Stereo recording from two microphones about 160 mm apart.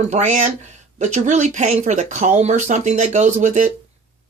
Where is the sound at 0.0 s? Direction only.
45° right (ahead or behind).